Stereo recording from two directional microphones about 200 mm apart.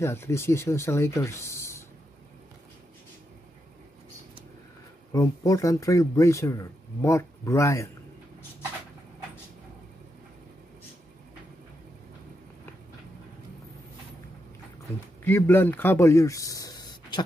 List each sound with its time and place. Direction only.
0.0 s speech: 15° left (ahead or behind)
5.1 s speech: 15° left (ahead or behind)
15.2 s speech: 10° left (ahead or behind)